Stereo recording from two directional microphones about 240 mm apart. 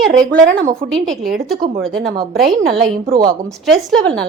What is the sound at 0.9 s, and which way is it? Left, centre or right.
Speech, centre.